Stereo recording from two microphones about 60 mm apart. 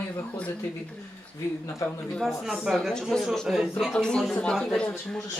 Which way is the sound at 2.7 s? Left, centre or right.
Centre.